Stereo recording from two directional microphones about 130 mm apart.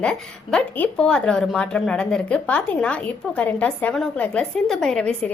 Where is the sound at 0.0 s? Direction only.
5° left (ahead or behind).